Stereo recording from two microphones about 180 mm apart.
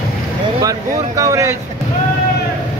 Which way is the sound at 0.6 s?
20° right (ahead or behind).